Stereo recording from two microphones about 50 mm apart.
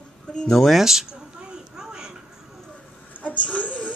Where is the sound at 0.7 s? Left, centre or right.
Centre.